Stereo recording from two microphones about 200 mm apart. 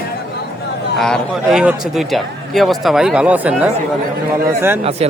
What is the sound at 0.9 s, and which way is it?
Speech, centre (ahead or behind).